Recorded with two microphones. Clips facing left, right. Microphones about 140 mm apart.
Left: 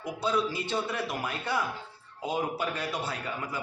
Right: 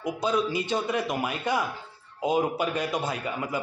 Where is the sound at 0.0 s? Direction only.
15° right (ahead or behind).